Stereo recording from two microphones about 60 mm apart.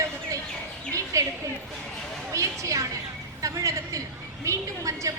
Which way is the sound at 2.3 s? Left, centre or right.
Right.